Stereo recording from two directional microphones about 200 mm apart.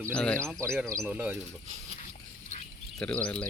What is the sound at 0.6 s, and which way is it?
Speech, 15° right (ahead or behind).